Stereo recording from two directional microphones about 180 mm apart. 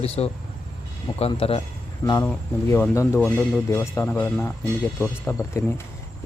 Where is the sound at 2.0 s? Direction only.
20° left (ahead or behind).